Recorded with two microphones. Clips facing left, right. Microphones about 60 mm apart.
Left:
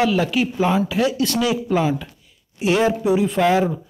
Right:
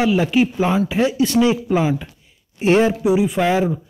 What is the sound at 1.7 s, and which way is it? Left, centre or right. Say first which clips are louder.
Speech: right 1 dB; centre.